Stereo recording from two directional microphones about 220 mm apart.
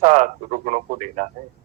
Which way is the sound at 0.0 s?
35° right (ahead or behind).